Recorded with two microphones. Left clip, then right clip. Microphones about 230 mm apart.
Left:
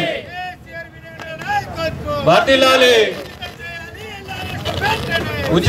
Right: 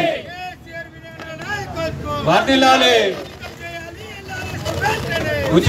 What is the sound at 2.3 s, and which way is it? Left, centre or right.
Speech, left.